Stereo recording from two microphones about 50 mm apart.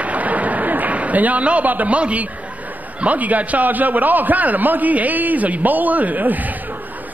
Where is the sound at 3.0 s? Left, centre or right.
Right.